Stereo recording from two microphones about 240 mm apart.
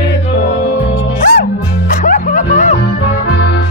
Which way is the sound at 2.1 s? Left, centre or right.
Left.